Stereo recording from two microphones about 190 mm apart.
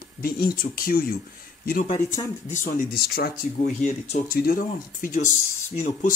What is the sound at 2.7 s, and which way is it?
Speech, 55° left (ahead or behind).